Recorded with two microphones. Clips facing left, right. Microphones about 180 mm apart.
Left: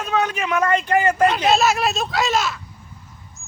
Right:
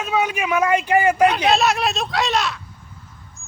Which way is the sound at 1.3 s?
Centre (ahead or behind).